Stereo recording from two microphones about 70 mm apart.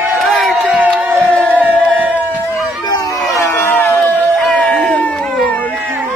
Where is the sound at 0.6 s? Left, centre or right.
Right.